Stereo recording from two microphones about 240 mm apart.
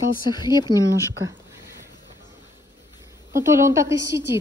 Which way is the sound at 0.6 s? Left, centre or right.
Centre.